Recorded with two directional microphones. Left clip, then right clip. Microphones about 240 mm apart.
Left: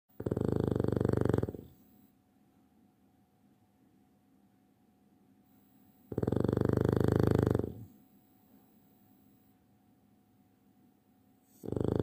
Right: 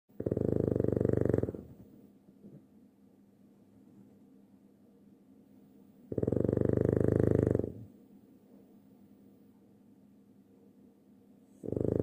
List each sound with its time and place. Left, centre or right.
0.2 s purr: centre
6.0 s purr: centre
11.6 s purr: left